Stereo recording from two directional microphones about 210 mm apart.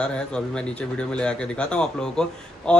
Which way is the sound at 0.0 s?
5° left (ahead or behind).